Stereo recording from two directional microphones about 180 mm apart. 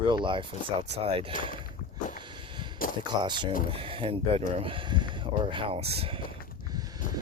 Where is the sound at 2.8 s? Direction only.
50° left (ahead or behind).